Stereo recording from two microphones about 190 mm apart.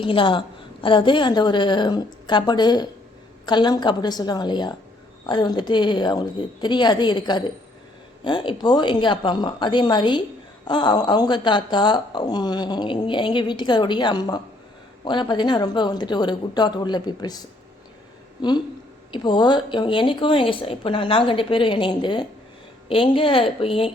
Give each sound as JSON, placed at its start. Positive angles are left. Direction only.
{"t": 0.0, "sound": "speech", "side_deg": 25}